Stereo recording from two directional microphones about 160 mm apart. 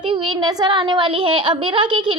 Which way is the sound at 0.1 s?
30° right (ahead or behind).